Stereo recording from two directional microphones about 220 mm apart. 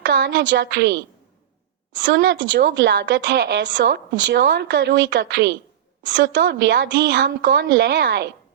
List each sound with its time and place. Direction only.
0.5 s a woman's voice: 50° right (ahead or behind)